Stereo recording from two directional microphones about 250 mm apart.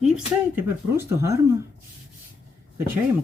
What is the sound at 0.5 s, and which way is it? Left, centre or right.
Speech, centre.